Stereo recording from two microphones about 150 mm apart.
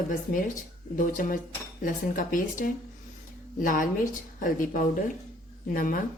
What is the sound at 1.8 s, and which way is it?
A woman's voice, 65° left (ahead or behind).